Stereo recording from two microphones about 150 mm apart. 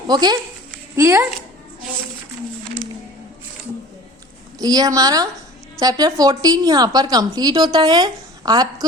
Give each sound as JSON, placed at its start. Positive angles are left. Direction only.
{"t": 0.1, "sound": "speech", "side_deg": -30}
{"t": 0.9, "sound": "speech", "side_deg": -15}
{"t": 4.6, "sound": "speech", "side_deg": -25}